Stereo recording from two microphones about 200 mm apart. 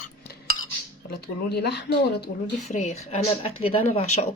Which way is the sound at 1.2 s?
55° left (ahead or behind).